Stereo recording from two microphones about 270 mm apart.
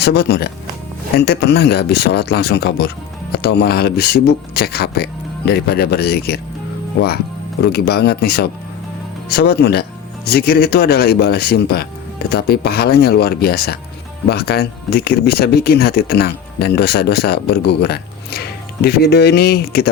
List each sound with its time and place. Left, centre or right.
0.0 s speech: left
7.6 s speech: left